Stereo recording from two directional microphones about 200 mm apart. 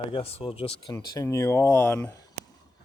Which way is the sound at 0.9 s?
15° left (ahead or behind).